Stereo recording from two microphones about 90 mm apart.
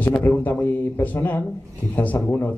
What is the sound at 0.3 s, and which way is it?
Speech, 15° left (ahead or behind).